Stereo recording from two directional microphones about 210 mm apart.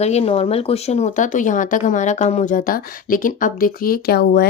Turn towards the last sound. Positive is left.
turn(degrees=50)  # may be behind; listen again after turning